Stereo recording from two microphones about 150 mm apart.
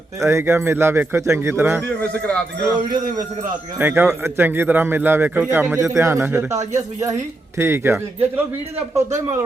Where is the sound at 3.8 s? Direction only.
15° right (ahead or behind).